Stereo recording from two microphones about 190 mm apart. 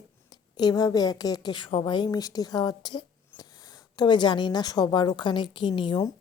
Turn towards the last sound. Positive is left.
turn(degrees=20)  # may be behind; listen again after turning